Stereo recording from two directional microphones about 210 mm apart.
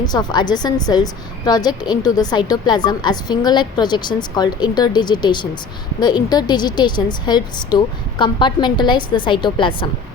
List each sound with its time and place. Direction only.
0.0 s a woman's voice: 20° left (ahead or behind)